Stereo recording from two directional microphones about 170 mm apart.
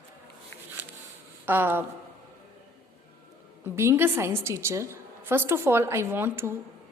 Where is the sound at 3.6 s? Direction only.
15° right (ahead or behind).